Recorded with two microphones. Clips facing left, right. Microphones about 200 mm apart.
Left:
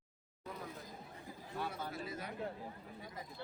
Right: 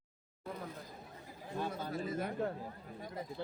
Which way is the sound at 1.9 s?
50° right (ahead or behind).